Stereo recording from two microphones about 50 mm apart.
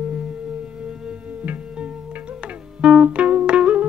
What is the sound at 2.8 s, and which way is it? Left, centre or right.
Music, right.